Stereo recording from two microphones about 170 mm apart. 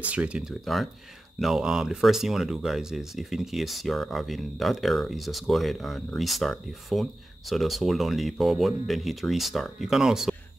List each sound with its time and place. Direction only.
0.0 s speech: 5° right (ahead or behind)